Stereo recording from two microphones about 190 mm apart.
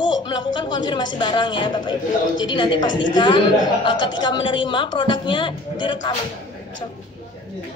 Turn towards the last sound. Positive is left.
turn(degrees=25)  # may be behind; listen again after turning